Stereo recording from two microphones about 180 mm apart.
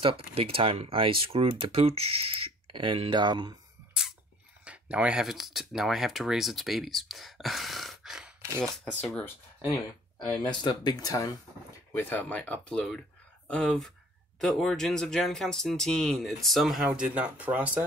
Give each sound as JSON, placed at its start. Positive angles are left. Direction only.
{"t": 0.0, "sound": "speech", "side_deg": -30}
{"t": 4.6, "sound": "speech", "side_deg": -5}
{"t": 10.4, "sound": "speech", "side_deg": 25}